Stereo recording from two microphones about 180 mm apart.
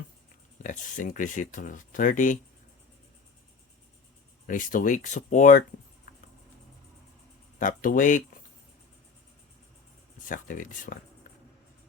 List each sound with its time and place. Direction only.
0.6 s speech: 45° left (ahead or behind)
4.4 s speech: 50° left (ahead or behind)
7.6 s speech: 45° left (ahead or behind)
10.2 s speech: 50° left (ahead or behind)